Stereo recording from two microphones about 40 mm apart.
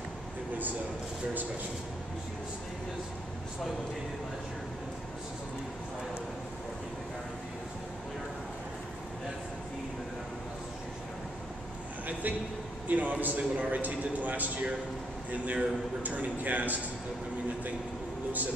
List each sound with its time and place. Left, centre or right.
12.1 s a man's voice: right